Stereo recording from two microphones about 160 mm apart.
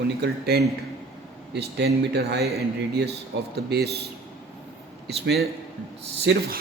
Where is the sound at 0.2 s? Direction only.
90° right.